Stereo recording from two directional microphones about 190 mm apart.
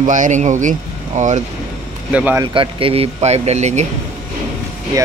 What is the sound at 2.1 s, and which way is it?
Speech, 10° right (ahead or behind).